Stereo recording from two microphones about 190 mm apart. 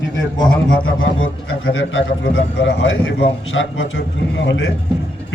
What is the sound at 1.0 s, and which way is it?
A man's voice, 90° left.